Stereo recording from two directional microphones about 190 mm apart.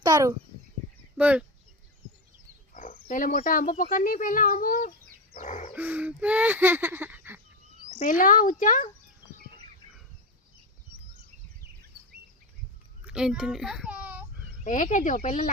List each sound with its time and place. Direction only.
0.0 s speech: 20° right (ahead or behind)
1.1 s speech: 5° right (ahead or behind)
2.7 s speech: 40° left (ahead or behind)
5.3 s bird: 40° left (ahead or behind)
5.7 s speech: 10° right (ahead or behind)
8.2 s speech: 45° left (ahead or behind)
13.1 s a child's voice: 5° right (ahead or behind)
14.6 s speech: 40° left (ahead or behind)